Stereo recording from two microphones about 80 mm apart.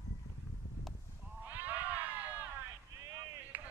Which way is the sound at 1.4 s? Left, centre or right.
Right.